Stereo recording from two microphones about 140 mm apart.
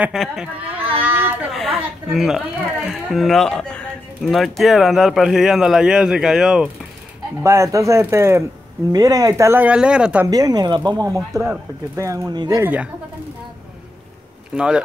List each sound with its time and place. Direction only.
0.0 s speech: 5° right (ahead or behind)
1.5 s speech: centre (ahead or behind)
7.4 s speech: 20° right (ahead or behind)
10.2 s speech: 25° right (ahead or behind)
12.6 s speech: 10° right (ahead or behind)
14.5 s speech: 5° right (ahead or behind)